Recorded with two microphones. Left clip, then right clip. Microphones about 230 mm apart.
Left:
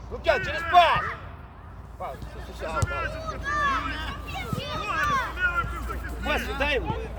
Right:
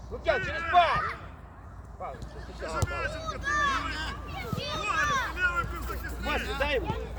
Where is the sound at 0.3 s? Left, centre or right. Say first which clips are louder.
Left 4 dB; left.